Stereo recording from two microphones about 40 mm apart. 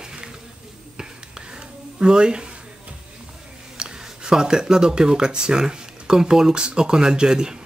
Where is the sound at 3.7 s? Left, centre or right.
Right.